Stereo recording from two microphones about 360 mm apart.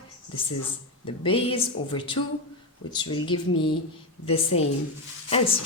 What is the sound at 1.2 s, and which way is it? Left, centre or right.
Speech, centre.